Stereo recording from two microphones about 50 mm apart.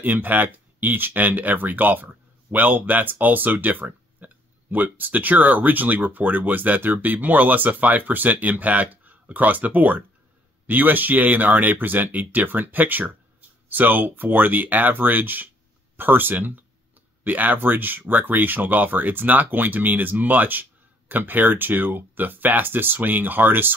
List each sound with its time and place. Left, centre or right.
0.0 s speech: right